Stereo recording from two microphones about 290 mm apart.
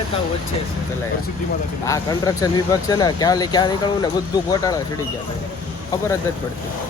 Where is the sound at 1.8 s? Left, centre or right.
Centre.